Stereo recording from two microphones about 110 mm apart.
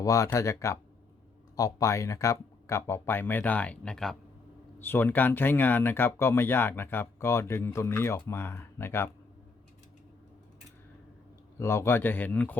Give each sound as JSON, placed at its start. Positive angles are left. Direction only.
{"t": 0.0, "sound": "speech", "side_deg": 30}
{"t": 4.8, "sound": "speech", "side_deg": 20}
{"t": 11.6, "sound": "speech", "side_deg": 25}